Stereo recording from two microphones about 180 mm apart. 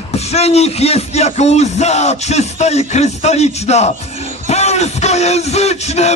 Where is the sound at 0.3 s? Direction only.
35° left (ahead or behind).